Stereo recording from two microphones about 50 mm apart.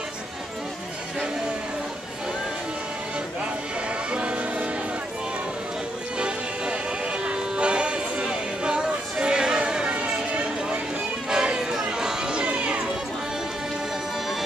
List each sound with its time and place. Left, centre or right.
4.1 s music: right
6.1 s music: right
11.2 s crowd: centre
12.4 s music: right